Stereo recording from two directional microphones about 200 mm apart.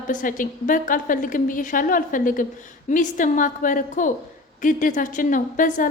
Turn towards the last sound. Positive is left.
turn(degrees=40)  # may be behind; listen again after turning